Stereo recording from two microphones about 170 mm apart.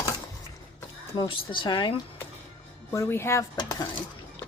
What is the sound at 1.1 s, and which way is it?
Speech, 30° left (ahead or behind).